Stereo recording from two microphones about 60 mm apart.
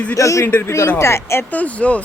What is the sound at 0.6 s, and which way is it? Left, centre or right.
Speech, left.